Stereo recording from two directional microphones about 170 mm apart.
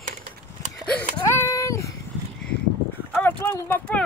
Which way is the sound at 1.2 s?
15° left (ahead or behind).